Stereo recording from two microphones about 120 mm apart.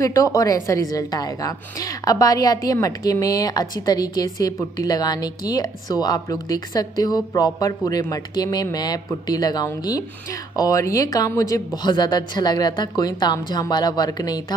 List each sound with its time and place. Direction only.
0.0 s a woman's voice: 25° left (ahead or behind)